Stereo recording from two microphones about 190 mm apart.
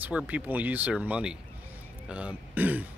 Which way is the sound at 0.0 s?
5° right (ahead or behind).